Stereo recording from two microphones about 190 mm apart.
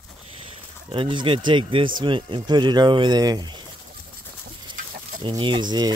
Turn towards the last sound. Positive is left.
turn(degrees=-20)  # may be behind; listen again after turning